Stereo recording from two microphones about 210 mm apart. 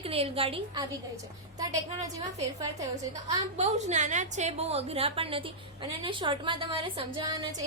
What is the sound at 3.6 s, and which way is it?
A woman's voice, 35° right (ahead or behind).